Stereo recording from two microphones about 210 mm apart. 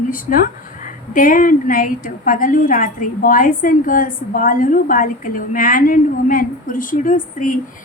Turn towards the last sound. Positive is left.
turn(degrees=35)  # may be behind; listen again after turning